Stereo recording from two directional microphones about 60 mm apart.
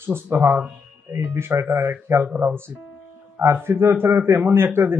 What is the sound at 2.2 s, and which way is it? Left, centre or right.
Speech, right.